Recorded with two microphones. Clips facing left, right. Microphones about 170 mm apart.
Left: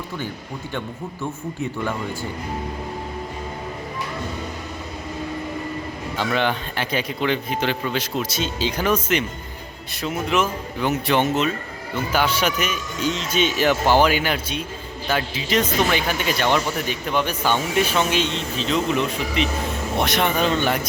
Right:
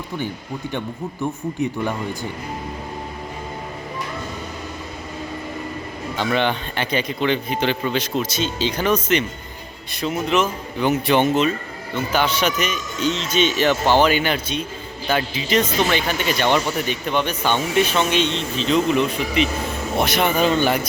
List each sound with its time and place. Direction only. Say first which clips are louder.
1.2 s speech: right 5 dB; 15° right (ahead or behind)
6.1 s speech: right 2 dB; 5° left (ahead or behind)